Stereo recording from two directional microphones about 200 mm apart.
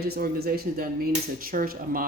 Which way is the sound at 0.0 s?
50° right (ahead or behind).